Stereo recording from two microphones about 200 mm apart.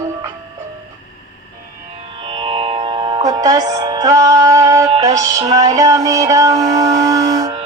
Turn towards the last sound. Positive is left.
turn(degrees=-20)  # may be behind; listen again after turning